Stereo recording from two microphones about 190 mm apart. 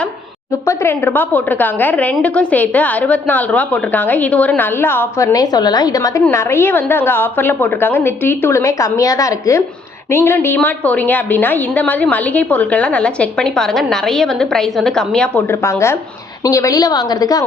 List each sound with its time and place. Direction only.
0.7 s a woman's voice: 15° left (ahead or behind)